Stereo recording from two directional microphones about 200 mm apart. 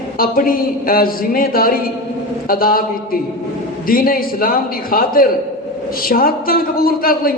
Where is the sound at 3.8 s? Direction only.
45° left (ahead or behind).